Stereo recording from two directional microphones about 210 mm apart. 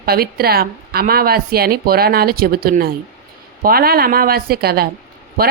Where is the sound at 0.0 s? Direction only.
45° right (ahead or behind).